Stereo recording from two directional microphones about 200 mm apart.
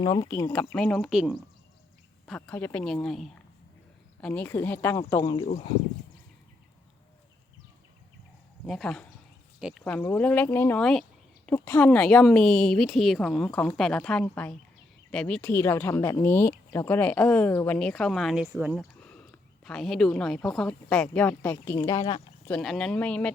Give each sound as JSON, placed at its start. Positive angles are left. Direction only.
{"t": 0.0, "sound": "speech", "side_deg": 20}
{"t": 0.5, "sound": "speech", "side_deg": 5}
{"t": 2.2, "sound": "speech", "side_deg": 5}
{"t": 8.6, "sound": "speech", "side_deg": 5}
{"t": 9.8, "sound": "speech", "side_deg": 10}
{"t": 22.4, "sound": "speech", "side_deg": 5}